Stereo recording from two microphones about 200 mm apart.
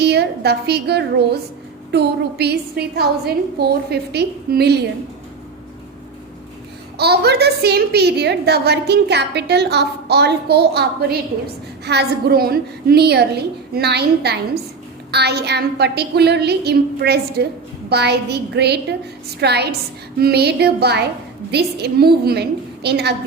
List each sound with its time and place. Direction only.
0.0 s a woman's voice: 55° right (ahead or behind)
6.9 s a woman's voice: 55° right (ahead or behind)